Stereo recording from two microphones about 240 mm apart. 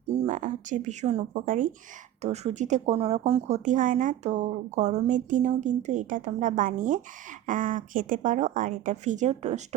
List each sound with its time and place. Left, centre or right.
0.1 s a woman's voice: right